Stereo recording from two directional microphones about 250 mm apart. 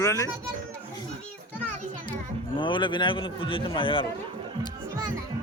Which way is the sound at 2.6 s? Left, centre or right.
Centre.